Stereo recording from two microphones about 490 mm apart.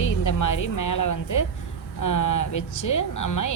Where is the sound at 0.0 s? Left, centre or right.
Left.